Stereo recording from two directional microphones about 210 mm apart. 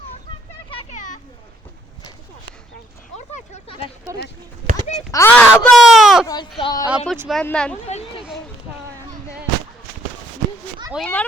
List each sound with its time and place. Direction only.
0.7 s children playing: 30° left (ahead or behind)
3.2 s a sound: 30° left (ahead or behind)
4.1 s speech: 15° right (ahead or behind)
5.1 s speech: 10° left (ahead or behind)
6.2 s a woman's voice: 20° left (ahead or behind)
6.9 s speech: centre (ahead or behind)
7.9 s a sound: 30° left (ahead or behind)
10.9 s speech: 5° left (ahead or behind)